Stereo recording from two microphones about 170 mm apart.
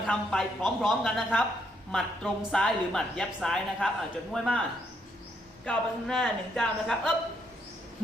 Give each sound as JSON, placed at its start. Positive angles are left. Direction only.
{"t": 0.1, "sound": "a woman's voice", "side_deg": 5}
{"t": 5.6, "sound": "a woman's voice", "side_deg": 0}